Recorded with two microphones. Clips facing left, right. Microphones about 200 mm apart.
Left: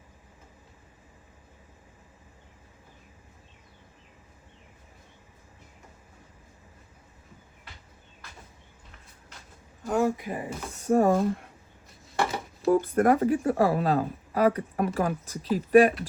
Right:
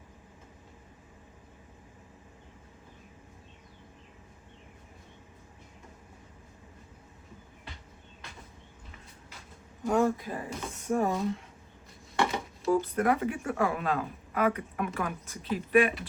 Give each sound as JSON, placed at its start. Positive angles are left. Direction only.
{"t": 9.8, "sound": "speech", "side_deg": 0}
{"t": 10.2, "sound": "speech", "side_deg": 15}
{"t": 10.8, "sound": "speech", "side_deg": 40}
{"t": 12.6, "sound": "speech", "side_deg": 55}